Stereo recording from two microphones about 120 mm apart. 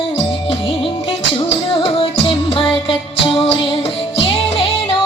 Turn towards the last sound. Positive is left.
turn(degrees=50)  # may be behind; listen again after turning